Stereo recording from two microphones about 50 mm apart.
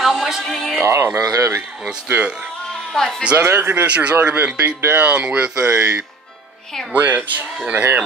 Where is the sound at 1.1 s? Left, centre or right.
Right.